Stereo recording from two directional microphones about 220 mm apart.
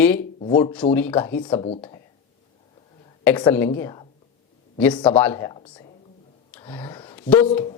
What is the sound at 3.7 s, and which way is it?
A woman's voice, 15° left (ahead or behind).